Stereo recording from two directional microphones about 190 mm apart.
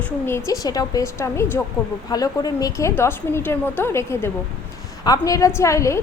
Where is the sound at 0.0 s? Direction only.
15° left (ahead or behind).